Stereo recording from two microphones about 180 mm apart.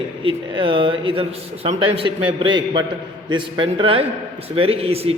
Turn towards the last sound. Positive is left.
turn(degrees=-35)  # may be behind; listen again after turning